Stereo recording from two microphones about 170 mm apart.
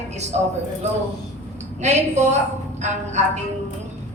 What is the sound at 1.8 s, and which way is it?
A woman's voice, 45° right (ahead or behind).